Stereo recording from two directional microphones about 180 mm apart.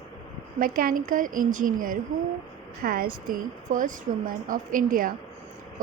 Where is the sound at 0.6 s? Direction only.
50° right (ahead or behind).